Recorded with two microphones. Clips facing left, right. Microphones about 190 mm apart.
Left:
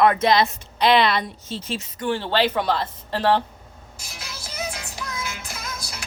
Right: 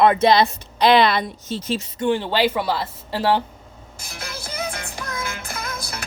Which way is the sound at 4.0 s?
55° right (ahead or behind).